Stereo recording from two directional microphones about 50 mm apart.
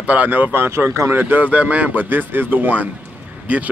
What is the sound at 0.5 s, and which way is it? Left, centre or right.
Speech, right.